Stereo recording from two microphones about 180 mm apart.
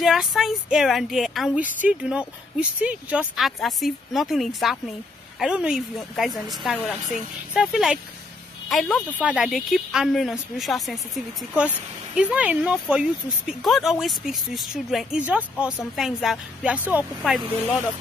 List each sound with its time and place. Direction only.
0.0 s a woman's voice: centre (ahead or behind)
12.2 s a woman's voice: 5° right (ahead or behind)